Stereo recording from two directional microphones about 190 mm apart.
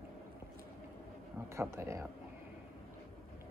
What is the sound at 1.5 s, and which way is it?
Speech, 15° right (ahead or behind).